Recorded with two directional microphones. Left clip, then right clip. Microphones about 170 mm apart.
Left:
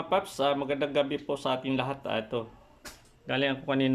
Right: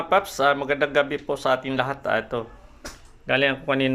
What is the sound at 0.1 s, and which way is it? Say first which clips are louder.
Speech: right 7 dB; 10° left (ahead or behind).